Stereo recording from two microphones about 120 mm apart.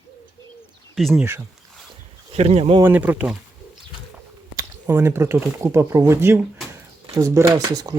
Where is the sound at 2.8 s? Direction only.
15° right (ahead or behind).